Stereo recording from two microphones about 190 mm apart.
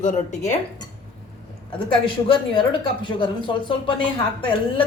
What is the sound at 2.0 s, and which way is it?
Speech, 25° left (ahead or behind).